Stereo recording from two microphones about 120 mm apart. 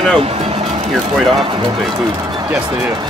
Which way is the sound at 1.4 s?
45° right (ahead or behind).